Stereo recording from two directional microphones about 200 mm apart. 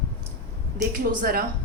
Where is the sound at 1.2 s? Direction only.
45° right (ahead or behind).